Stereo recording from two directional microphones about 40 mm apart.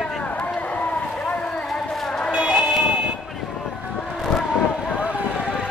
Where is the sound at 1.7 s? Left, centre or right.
Centre.